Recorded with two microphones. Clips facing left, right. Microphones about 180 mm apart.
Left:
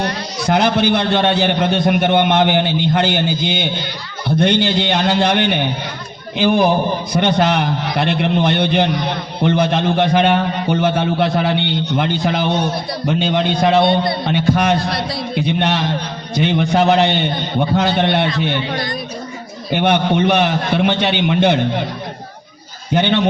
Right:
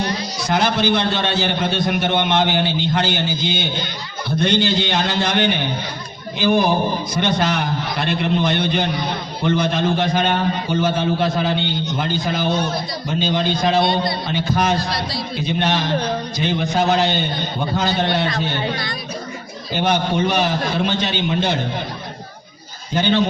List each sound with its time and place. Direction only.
0.0 s a man's voice: 60° left (ahead or behind)
19.7 s a man's voice: 60° left (ahead or behind)
23.0 s a man's voice: 65° left (ahead or behind)